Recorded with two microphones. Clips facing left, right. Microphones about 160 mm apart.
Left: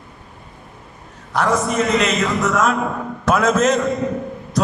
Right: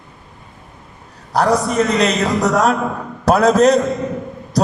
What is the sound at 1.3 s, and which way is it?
A man's voice, 35° right (ahead or behind).